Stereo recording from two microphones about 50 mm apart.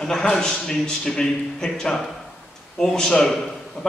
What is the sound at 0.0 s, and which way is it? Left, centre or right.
A man's voice, centre.